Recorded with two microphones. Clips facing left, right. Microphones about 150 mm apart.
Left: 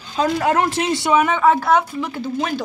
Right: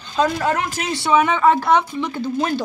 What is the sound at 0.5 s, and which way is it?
Speech, 25° left (ahead or behind).